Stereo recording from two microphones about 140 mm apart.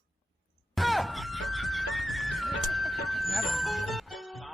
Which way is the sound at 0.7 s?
Centre (ahead or behind).